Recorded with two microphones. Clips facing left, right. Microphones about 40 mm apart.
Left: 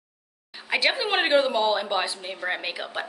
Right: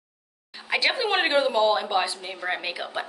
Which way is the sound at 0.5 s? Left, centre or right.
Centre.